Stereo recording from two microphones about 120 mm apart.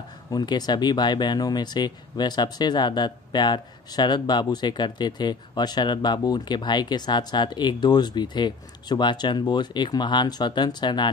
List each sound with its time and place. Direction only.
0.3 s speech: 35° left (ahead or behind)